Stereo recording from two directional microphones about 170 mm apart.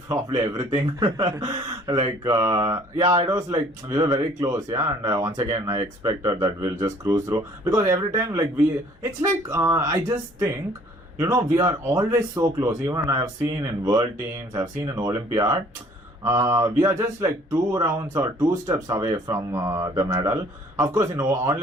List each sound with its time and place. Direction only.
0.3 s speech: 20° right (ahead or behind)